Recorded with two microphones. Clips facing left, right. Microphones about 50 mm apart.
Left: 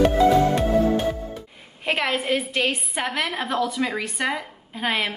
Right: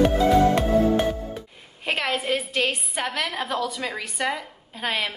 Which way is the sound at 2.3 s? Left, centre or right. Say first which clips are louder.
Left 1 dB; centre.